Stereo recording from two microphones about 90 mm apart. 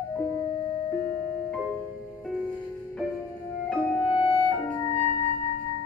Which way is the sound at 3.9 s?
25° left (ahead or behind).